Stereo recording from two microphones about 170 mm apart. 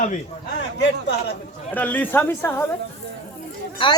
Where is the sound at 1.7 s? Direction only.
10° left (ahead or behind).